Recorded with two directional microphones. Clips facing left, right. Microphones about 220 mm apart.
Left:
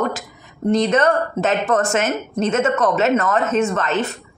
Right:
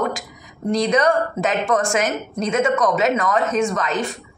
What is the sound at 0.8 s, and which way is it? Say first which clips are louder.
Speech: right 1 dB; 10° right (ahead or behind).